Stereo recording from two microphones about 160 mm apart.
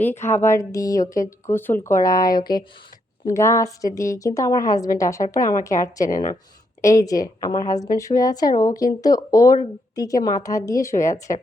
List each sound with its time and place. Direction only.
0.0 s a woman's voice: 15° left (ahead or behind)
6.1 s speech: 55° left (ahead or behind)
6.8 s a woman's voice: 20° left (ahead or behind)